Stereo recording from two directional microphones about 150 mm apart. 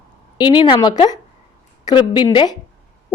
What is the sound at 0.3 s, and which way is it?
A woman's voice, 30° left (ahead or behind).